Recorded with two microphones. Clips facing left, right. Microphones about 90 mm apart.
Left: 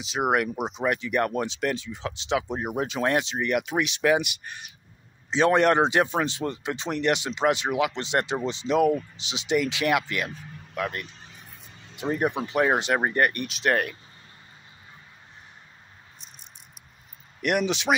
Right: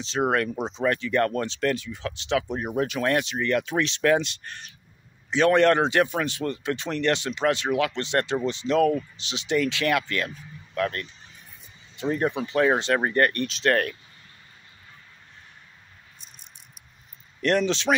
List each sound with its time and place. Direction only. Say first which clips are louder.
0.0 s speech: even; 15° left (ahead or behind)
17.4 s speech: right 2 dB; 15° left (ahead or behind)